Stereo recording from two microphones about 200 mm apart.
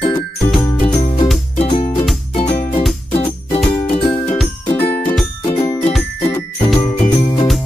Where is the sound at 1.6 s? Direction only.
30° left (ahead or behind).